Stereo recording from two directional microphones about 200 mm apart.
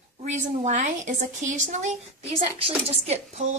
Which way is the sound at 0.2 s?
35° right (ahead or behind).